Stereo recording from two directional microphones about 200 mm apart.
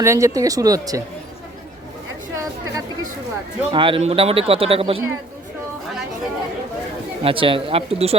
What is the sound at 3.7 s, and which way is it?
Speech, 25° right (ahead or behind).